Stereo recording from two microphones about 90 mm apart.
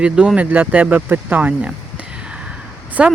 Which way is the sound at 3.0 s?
10° right (ahead or behind).